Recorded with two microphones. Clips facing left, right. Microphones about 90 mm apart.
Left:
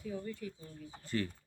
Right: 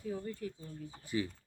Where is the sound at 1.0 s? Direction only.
10° right (ahead or behind).